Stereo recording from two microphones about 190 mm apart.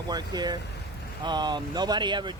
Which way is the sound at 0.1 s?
20° right (ahead or behind).